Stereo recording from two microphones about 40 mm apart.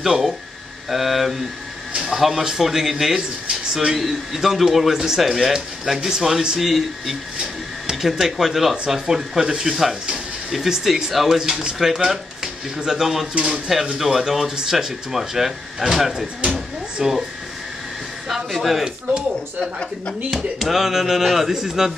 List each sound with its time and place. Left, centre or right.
0.0 s speech: centre
3.2 s speech: right
18.5 s speech: centre
20.5 s speech: centre